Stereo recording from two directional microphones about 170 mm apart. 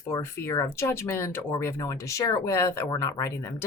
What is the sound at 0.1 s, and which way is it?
A woman's voice, 15° left (ahead or behind).